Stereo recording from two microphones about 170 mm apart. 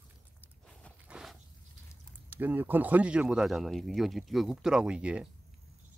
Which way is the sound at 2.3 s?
10° right (ahead or behind).